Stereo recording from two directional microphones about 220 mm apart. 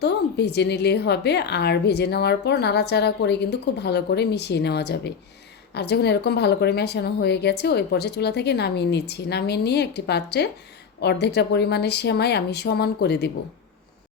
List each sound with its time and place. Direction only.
0.0 s speech: 50° left (ahead or behind)